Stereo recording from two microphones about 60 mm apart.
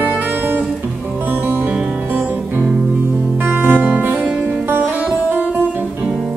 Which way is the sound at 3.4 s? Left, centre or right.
Right.